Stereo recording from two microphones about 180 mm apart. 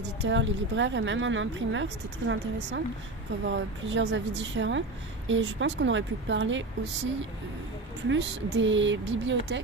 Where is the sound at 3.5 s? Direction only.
90° right.